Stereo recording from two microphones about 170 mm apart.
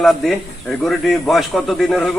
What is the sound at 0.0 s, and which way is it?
Speech, centre (ahead or behind).